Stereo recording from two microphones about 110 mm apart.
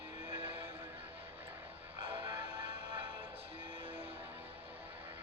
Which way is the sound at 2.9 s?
55° right (ahead or behind).